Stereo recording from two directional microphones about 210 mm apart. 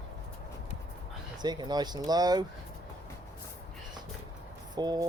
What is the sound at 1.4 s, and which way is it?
Speech, 20° right (ahead or behind).